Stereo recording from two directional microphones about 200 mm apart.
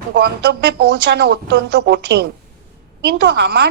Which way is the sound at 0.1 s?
50° right (ahead or behind).